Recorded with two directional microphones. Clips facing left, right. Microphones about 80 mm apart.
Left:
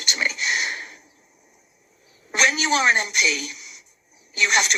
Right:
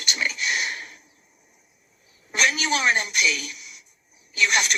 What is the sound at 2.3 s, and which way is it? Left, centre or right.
Speech, left.